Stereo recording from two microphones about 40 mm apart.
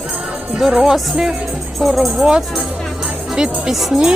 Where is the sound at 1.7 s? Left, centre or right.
Centre.